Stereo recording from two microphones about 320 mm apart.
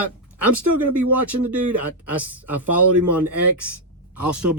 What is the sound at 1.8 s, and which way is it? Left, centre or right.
Speech, centre.